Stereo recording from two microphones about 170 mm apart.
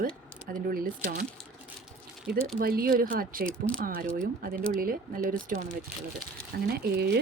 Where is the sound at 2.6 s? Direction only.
60° right (ahead or behind).